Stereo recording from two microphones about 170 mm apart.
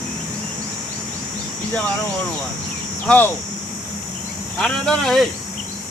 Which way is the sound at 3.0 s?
10° left (ahead or behind).